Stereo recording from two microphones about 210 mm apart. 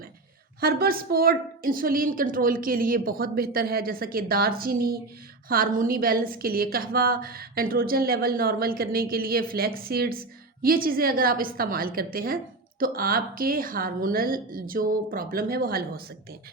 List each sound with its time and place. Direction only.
0.6 s a woman's voice: 45° right (ahead or behind)